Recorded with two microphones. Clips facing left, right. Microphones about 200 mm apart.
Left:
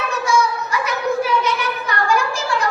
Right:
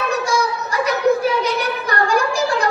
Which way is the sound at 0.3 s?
35° right (ahead or behind).